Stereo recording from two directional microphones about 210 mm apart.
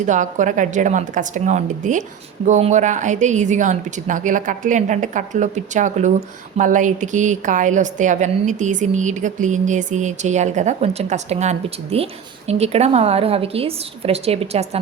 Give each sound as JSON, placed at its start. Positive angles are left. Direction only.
{"t": 0.0, "sound": "a woman's voice", "side_deg": -35}